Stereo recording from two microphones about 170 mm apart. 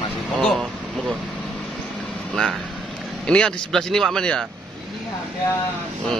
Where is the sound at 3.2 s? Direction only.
5° left (ahead or behind).